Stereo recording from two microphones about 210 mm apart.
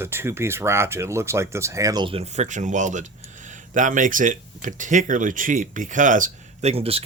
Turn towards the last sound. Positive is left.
turn(degrees=-30)  # may be behind; listen again after turning